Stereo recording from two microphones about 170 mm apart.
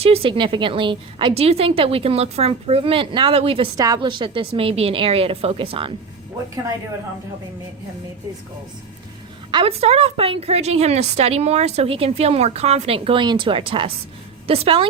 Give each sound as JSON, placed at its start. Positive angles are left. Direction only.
{"t": 0.0, "sound": "a woman's voice", "side_deg": -35}
{"t": 3.8, "sound": "a woman's voice", "side_deg": -20}
{"t": 9.5, "sound": "a woman's voice", "side_deg": -30}